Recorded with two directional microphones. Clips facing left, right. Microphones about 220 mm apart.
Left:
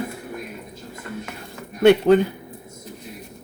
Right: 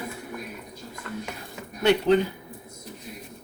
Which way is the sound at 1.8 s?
55° left (ahead or behind).